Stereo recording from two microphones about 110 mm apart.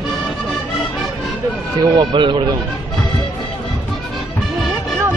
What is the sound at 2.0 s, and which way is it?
Speech, 45° right (ahead or behind).